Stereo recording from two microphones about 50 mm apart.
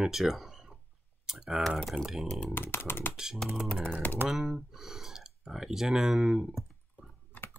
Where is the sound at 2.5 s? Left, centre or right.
Left.